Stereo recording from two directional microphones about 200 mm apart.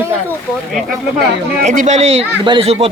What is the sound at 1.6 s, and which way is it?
Speech, 40° right (ahead or behind).